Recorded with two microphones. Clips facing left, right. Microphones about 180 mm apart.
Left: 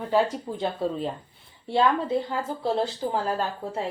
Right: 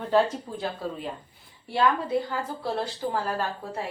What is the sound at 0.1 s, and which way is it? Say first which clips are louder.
Speech: right 1 dB; 20° left (ahead or behind).